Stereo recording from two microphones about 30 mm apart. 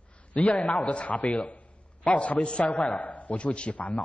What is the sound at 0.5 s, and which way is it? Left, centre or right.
Speech, left.